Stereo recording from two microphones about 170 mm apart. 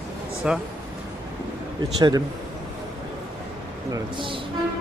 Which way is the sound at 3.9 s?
30° right (ahead or behind).